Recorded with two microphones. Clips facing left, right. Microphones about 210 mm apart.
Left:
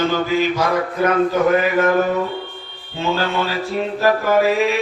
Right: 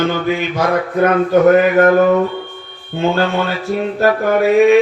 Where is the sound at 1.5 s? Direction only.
50° right (ahead or behind).